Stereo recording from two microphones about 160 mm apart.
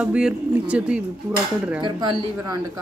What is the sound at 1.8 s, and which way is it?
Speech, 30° right (ahead or behind).